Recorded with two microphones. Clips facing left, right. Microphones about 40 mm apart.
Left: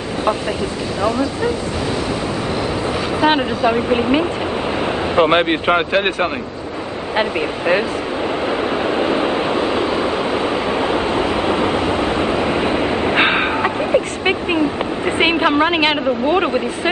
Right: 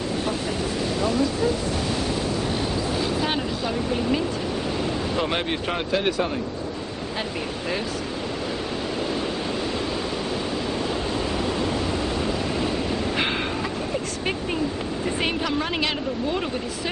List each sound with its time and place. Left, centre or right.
3.2 s speech: left
8.5 s vehicle: left
15.0 s speech: left